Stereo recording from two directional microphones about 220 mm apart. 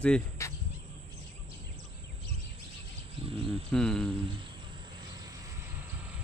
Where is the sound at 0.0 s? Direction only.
10° left (ahead or behind).